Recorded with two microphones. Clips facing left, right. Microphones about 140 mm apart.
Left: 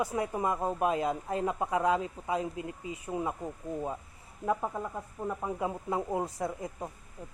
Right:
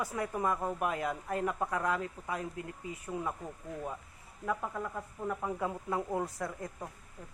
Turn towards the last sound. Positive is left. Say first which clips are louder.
# left 4 dB
turn(degrees=20)  # may be behind; listen again after turning